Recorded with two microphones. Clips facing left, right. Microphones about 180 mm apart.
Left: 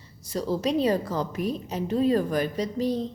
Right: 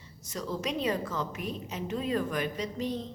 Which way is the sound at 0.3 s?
30° left (ahead or behind).